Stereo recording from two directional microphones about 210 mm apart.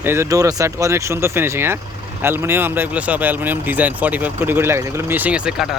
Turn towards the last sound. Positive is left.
turn(degrees=-5)  # may be behind; listen again after turning